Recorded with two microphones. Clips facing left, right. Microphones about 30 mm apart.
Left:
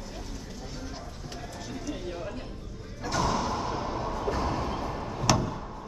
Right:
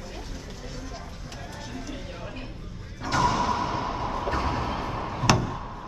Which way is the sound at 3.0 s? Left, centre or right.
Right.